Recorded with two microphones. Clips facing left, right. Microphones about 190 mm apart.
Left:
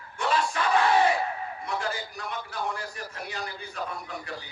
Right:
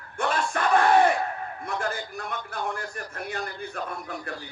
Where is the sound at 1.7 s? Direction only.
50° right (ahead or behind).